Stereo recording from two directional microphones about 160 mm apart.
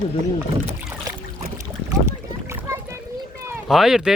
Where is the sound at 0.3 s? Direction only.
15° right (ahead or behind).